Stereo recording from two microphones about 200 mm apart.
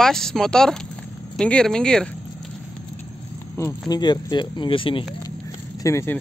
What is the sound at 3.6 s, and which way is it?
Speech, 15° left (ahead or behind).